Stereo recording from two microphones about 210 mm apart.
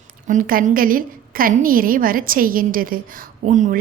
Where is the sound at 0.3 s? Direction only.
40° right (ahead or behind).